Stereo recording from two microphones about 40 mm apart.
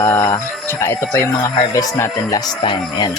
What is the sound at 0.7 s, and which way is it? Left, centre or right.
Speech, left.